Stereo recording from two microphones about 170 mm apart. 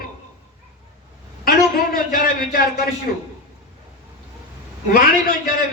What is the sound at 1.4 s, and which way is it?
A man's voice, 60° left (ahead or behind).